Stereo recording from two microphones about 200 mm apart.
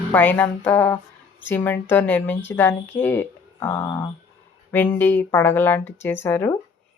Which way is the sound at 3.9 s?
20° left (ahead or behind).